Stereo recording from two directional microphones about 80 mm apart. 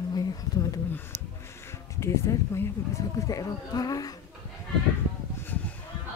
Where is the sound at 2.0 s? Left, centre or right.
Left.